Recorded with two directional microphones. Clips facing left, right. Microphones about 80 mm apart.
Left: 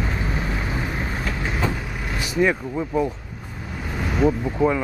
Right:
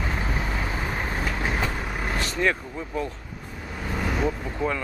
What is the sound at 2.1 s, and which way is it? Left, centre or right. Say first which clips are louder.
Vehicle: left 5 dB; centre.